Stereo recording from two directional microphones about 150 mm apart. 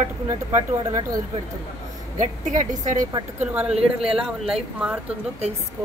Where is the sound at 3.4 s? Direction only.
10° right (ahead or behind).